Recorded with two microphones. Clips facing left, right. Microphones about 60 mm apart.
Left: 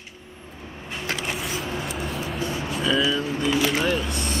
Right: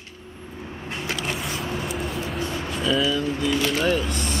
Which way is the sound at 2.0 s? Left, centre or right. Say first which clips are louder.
Even; centre.